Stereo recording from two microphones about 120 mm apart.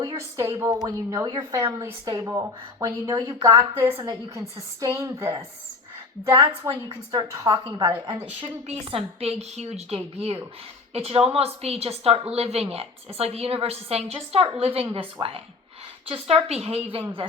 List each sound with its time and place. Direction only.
0.2 s a woman's voice: 25° right (ahead or behind)
7.6 s a woman's voice: 40° right (ahead or behind)
8.4 s a woman's voice: 55° right (ahead or behind)